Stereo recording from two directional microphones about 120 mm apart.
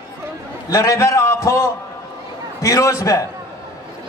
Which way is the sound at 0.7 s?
30° left (ahead or behind).